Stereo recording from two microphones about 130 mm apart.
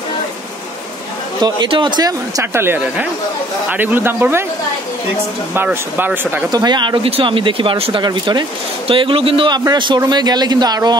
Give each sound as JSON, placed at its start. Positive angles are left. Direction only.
{"t": 1.4, "sound": "a man's voice", "side_deg": -35}
{"t": 5.5, "sound": "speech", "side_deg": -15}
{"t": 6.5, "sound": "a man's voice", "side_deg": -35}